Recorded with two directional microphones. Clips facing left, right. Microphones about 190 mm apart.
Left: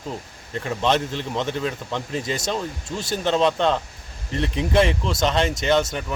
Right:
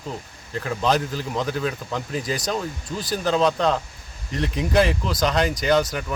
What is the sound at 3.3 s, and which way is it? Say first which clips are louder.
Speech: even; centre (ahead or behind).